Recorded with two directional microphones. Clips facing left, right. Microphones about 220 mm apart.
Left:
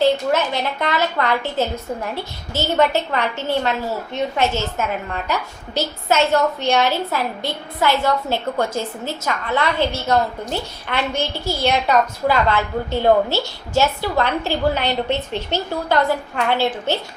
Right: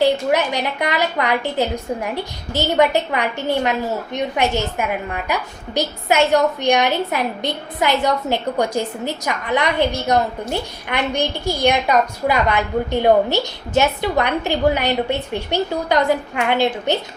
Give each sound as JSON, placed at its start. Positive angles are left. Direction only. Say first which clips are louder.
{"t": 0.0, "sound": "a woman's voice", "louder": "right 1 dB", "side_deg": -15}